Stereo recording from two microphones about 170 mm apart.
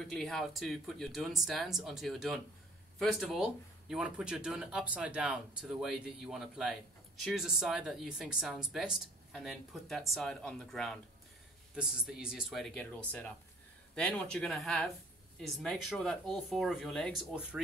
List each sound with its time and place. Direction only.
0.0 s speech: 5° left (ahead or behind)